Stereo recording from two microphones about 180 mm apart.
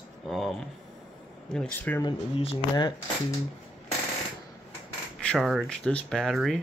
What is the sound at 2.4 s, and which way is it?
Speech, 30° left (ahead or behind).